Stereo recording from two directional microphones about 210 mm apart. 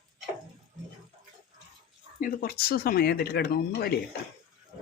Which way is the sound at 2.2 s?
45° left (ahead or behind).